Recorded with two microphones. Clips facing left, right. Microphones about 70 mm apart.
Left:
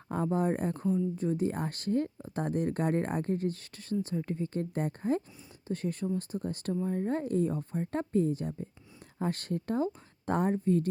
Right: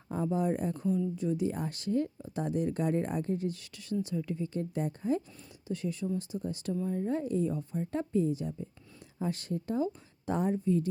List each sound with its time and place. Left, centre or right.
0.1 s speech: left